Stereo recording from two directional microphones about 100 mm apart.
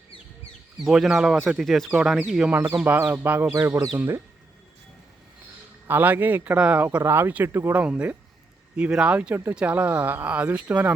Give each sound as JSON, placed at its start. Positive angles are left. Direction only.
{"t": 0.9, "sound": "speech", "side_deg": -5}
{"t": 2.5, "sound": "speech", "side_deg": -20}
{"t": 3.4, "sound": "speech", "side_deg": -30}
{"t": 5.9, "sound": "speech", "side_deg": -15}
{"t": 7.8, "sound": "speech", "side_deg": -10}